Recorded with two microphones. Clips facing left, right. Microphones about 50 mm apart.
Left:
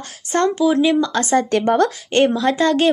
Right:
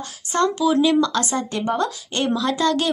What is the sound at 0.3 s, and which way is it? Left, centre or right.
Speech, left.